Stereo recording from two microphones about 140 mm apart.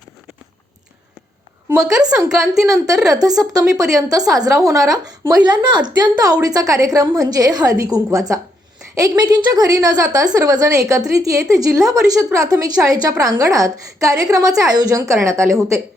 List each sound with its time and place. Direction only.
2.3 s a woman's voice: centre (ahead or behind)
2.6 s a woman's voice: 25° right (ahead or behind)
2.9 s a woman's voice: centre (ahead or behind)
3.2 s a woman's voice: 25° right (ahead or behind)